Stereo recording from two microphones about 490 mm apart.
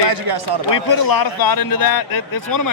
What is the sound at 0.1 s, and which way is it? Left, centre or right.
Speech, right.